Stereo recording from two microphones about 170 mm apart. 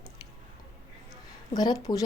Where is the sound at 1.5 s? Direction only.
25° left (ahead or behind).